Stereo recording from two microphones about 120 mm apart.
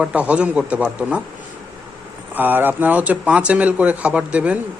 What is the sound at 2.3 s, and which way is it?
Speech, 15° right (ahead or behind).